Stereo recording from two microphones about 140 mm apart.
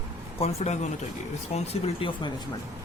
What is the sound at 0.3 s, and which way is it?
Speech, 50° left (ahead or behind).